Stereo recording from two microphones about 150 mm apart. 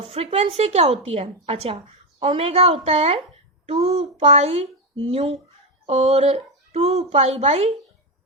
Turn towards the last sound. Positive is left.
turn(degrees=-40)  # may be behind; listen again after turning